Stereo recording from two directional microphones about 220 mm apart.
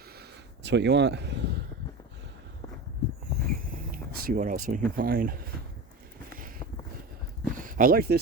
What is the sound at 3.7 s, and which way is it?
Speech, 40° right (ahead or behind).